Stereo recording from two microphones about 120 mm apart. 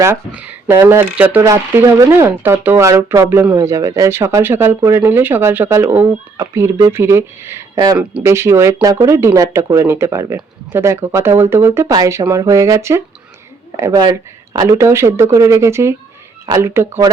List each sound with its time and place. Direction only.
0.3 s speech: 10° right (ahead or behind)